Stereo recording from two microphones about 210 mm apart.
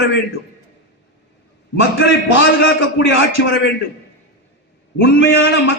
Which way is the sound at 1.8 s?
60° left (ahead or behind).